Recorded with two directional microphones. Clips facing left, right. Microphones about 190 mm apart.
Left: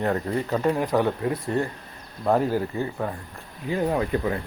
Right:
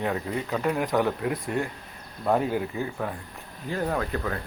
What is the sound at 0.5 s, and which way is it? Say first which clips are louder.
Speech: left 3 dB; 35° left (ahead or behind).